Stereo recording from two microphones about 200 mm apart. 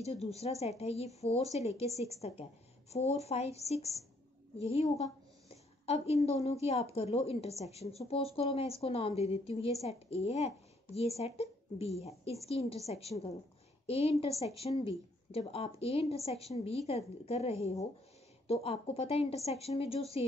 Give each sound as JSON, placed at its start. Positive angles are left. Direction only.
{"t": 0.0, "sound": "a woman's voice", "side_deg": 30}